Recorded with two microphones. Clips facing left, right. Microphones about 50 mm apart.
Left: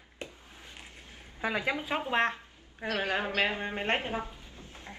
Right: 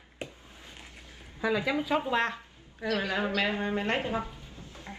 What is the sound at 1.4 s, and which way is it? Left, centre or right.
A woman's voice, left.